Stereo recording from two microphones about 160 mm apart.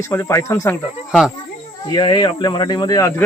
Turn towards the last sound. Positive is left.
turn(degrees=20)  # may be behind; listen again after turning